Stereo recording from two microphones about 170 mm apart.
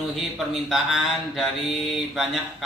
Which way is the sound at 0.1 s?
Centre (ahead or behind).